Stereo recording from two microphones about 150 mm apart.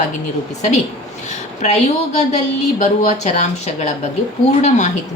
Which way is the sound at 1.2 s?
50° left (ahead or behind).